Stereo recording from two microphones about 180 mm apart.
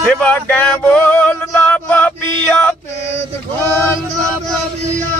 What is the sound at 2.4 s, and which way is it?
Mantra, 10° left (ahead or behind).